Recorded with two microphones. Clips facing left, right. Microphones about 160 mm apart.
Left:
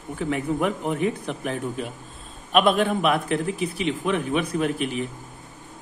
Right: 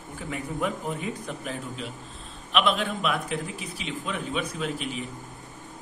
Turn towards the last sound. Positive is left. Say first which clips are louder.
# left 7 dB
turn(degrees=60)  # may be behind; listen again after turning